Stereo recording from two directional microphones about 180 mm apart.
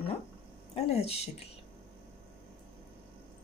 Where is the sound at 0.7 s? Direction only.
35° left (ahead or behind).